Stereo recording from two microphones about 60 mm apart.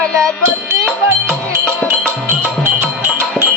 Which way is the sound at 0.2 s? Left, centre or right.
Right.